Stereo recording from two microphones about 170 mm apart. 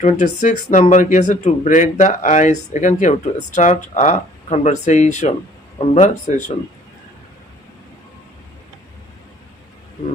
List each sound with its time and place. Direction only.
0.0 s speech: 45° left (ahead or behind)